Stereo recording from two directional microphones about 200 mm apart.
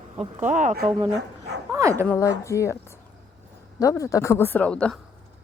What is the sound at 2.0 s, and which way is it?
Speech, 15° left (ahead or behind).